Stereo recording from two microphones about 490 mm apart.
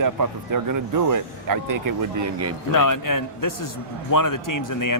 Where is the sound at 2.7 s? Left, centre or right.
Left.